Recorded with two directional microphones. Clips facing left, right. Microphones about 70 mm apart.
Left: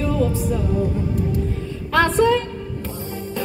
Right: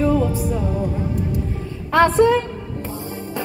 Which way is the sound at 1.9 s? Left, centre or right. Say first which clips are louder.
Right 2 dB; right.